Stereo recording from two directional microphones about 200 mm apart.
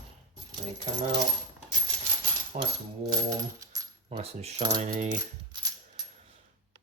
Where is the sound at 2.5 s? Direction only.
40° right (ahead or behind).